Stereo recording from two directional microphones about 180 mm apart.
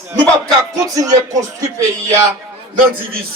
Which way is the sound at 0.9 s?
20° right (ahead or behind).